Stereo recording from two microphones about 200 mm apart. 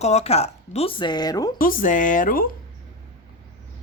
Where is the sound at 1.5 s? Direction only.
45° left (ahead or behind).